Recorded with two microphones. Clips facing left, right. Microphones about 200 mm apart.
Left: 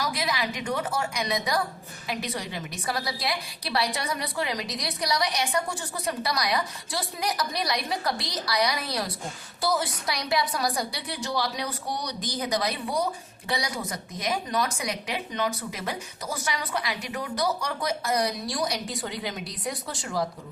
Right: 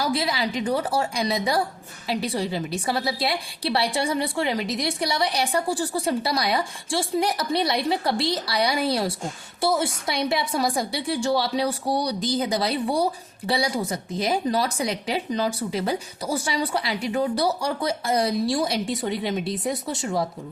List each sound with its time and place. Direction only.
0.0 s a woman's voice: 30° right (ahead or behind)